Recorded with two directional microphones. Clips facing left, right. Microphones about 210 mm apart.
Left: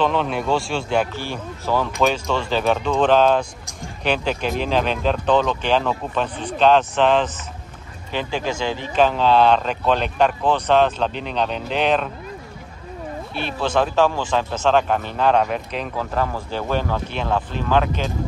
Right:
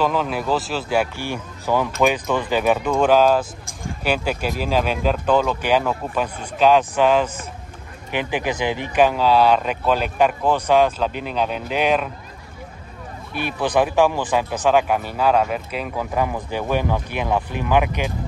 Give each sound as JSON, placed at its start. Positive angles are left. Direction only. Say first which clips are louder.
{"t": 0.0, "sound": "speech", "louder": "left 1 dB", "side_deg": -5}
{"t": 13.5, "sound": "speech", "louder": "right 1 dB", "side_deg": -15}